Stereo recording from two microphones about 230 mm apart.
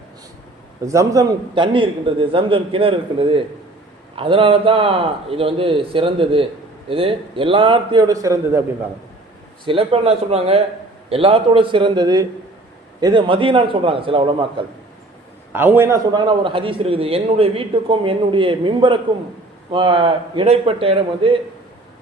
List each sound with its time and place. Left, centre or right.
0.9 s a man's voice: centre
9.6 s a man's voice: right
15.5 s a man's voice: centre; by 21.3 s right